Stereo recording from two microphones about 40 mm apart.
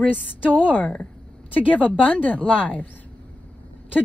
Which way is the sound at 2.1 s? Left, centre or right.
Left.